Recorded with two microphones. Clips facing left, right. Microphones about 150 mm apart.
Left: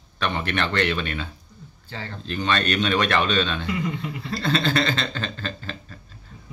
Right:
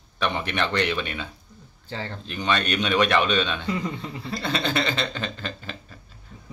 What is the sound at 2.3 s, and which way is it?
Chuckle, 15° right (ahead or behind).